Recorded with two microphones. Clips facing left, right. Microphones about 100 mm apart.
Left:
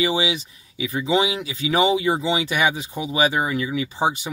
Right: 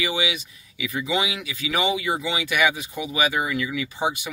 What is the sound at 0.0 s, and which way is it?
Speech, 30° left (ahead or behind).